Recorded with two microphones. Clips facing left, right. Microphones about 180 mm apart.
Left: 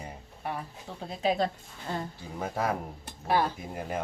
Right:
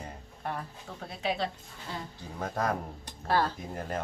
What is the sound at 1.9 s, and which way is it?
Speech, 50° left (ahead or behind).